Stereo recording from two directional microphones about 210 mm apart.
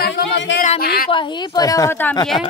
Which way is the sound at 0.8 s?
45° left (ahead or behind).